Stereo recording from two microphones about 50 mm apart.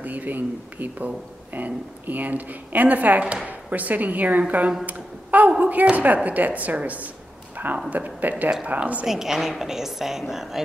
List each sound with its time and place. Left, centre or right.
0.0 s speech: right
9.0 s a woman's voice: centre